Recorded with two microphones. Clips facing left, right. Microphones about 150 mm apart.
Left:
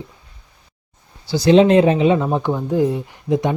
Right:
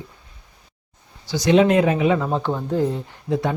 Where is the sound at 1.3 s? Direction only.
30° left (ahead or behind).